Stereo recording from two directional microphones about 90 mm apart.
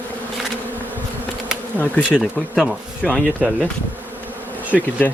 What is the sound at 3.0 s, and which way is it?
Speech, 15° left (ahead or behind).